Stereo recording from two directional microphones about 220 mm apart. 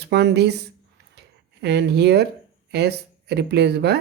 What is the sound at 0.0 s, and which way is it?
Speech, 50° right (ahead or behind).